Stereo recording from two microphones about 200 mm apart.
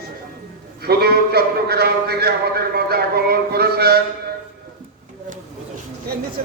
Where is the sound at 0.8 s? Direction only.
50° right (ahead or behind).